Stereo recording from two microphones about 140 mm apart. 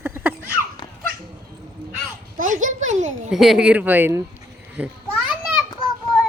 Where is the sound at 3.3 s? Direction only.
5° right (ahead or behind).